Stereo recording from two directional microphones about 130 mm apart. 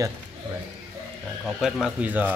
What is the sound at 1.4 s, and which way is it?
Speech, centre (ahead or behind).